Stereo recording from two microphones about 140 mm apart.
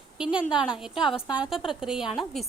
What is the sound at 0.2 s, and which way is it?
A woman's voice, 5° right (ahead or behind).